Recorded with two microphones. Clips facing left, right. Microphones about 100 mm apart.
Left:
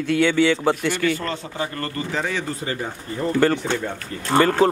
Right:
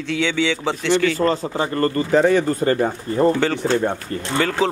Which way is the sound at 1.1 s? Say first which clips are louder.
Right 8 dB; 30° right (ahead or behind).